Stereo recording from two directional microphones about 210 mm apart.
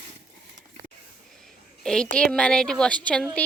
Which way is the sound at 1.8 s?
5° left (ahead or behind).